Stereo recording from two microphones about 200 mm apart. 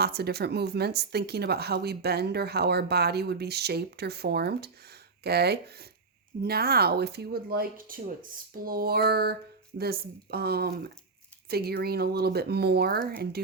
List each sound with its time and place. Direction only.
0.0 s speech: 55° right (ahead or behind)